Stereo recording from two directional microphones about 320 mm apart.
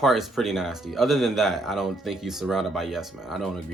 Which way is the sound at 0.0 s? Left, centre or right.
Centre.